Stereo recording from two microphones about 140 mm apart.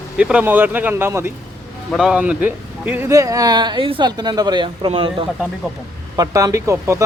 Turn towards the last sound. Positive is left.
turn(degrees=-20)  # may be behind; listen again after turning